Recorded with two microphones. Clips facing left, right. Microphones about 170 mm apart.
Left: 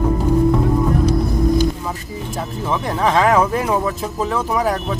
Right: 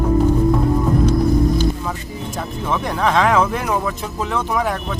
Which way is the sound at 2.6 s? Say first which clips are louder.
Left 1 dB; 5° left (ahead or behind).